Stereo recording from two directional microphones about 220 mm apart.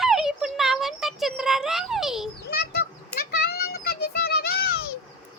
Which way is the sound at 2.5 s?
45° left (ahead or behind).